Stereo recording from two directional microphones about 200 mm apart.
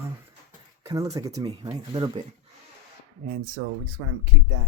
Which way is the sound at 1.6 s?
30° right (ahead or behind).